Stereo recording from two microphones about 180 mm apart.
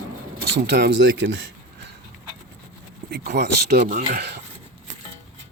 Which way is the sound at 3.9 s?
40° right (ahead or behind).